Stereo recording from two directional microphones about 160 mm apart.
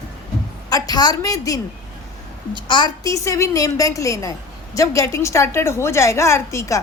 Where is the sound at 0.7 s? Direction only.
25° left (ahead or behind).